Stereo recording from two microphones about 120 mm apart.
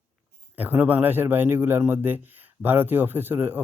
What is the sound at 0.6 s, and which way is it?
Speech, 15° right (ahead or behind).